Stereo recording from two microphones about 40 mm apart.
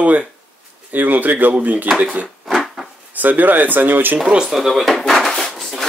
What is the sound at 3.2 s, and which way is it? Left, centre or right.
Speech, right.